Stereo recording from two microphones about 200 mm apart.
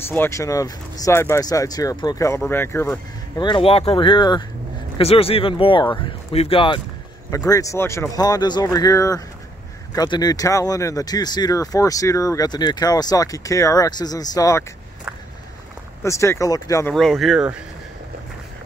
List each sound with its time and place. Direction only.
0.1 s speech: 10° left (ahead or behind)
3.3 s speech: 25° left (ahead or behind)
16.0 s speech: 15° left (ahead or behind)
16.9 s speech: centre (ahead or behind)